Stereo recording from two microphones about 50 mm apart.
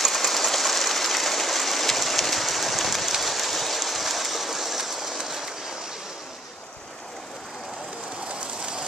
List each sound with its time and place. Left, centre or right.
0.0 s train: centre
8.3 s train: right